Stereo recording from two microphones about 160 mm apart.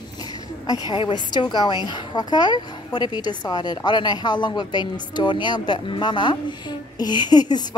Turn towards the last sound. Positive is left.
turn(degrees=25)  # may be behind; listen again after turning